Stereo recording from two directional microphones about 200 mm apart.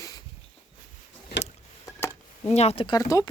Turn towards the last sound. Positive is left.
turn(degrees=20)  # may be behind; listen again after turning